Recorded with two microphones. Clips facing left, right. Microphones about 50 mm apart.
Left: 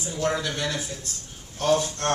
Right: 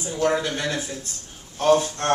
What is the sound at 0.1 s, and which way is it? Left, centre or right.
A man's voice, centre.